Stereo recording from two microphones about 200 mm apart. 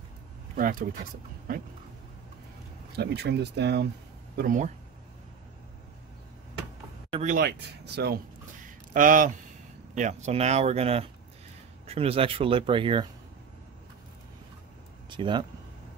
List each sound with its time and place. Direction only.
0.6 s speech: 45° right (ahead or behind)
3.0 s speech: 55° right (ahead or behind)
4.4 s speech: 40° right (ahead or behind)
7.1 s a sound: 35° right (ahead or behind)
7.3 s speech: 55° right (ahead or behind)
8.6 s a sound: 40° right (ahead or behind)
9.9 s speech: 35° right (ahead or behind)
15.0 s speech: 25° right (ahead or behind)